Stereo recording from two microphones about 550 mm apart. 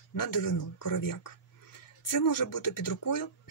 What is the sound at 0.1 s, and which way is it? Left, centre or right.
Speech, left.